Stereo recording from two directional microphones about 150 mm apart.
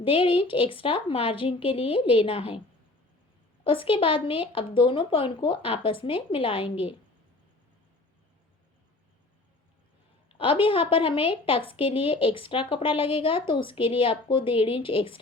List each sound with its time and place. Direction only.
0.0 s speech: 35° left (ahead or behind)
3.6 s speech: 35° left (ahead or behind)
10.3 s speech: 35° left (ahead or behind)